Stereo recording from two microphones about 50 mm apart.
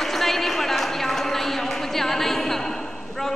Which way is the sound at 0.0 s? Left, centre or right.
Centre.